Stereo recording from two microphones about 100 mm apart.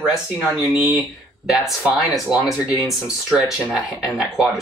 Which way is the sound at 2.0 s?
5° right (ahead or behind).